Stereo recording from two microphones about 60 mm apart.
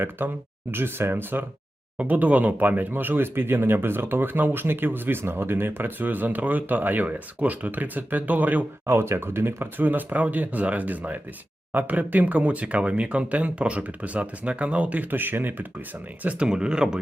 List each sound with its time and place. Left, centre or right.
0.2 s speech: right
2.0 s speech: right
8.9 s speech: right
16.2 s speech: right
16.5 s speech: centre